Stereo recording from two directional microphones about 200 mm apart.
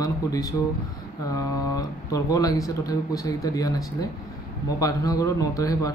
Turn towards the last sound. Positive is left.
turn(degrees=15)  # may be behind; listen again after turning